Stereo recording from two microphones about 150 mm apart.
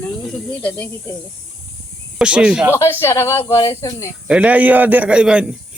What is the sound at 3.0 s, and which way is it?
Speech, 15° left (ahead or behind).